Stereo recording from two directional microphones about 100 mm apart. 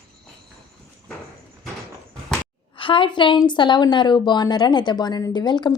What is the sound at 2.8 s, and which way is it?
A woman's voice, 60° left (ahead or behind).